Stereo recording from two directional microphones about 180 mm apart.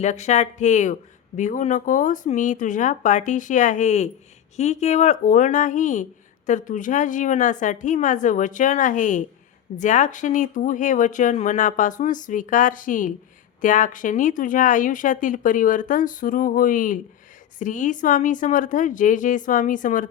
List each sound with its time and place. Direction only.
0.0 s speech: 40° left (ahead or behind)